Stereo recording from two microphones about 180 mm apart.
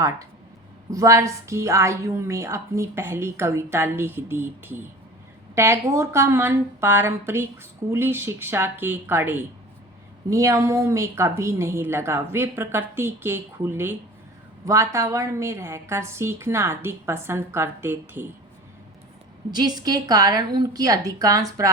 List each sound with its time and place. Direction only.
0.9 s a woman's voice: 20° right (ahead or behind)
19.5 s a woman's voice: 20° right (ahead or behind)